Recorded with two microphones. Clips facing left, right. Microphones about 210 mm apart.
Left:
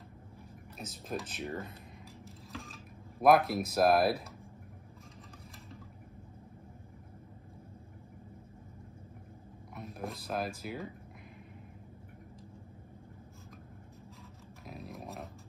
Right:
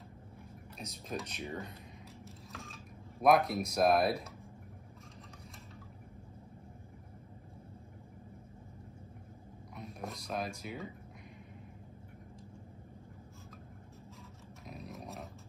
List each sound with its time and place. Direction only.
0.7 s speech: centre (ahead or behind)
2.5 s a sound: centre (ahead or behind)
9.8 s speech: centre (ahead or behind)
14.7 s dog: centre (ahead or behind)